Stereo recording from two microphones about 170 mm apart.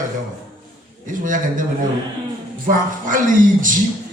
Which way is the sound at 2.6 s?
50° right (ahead or behind).